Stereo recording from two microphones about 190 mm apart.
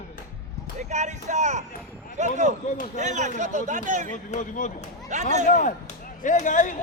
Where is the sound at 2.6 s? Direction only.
45° left (ahead or behind).